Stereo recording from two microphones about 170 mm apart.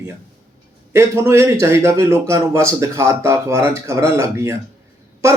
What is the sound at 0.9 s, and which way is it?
Speech, 15° right (ahead or behind).